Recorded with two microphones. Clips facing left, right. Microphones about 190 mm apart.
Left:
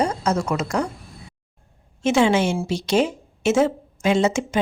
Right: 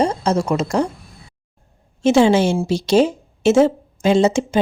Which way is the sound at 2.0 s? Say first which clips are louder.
Right 5 dB; 35° right (ahead or behind).